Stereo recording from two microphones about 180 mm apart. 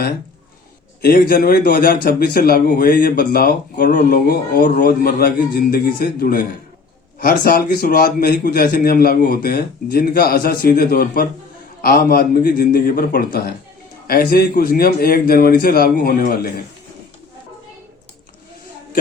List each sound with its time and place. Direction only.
1.0 s a man's voice: 55° left (ahead or behind)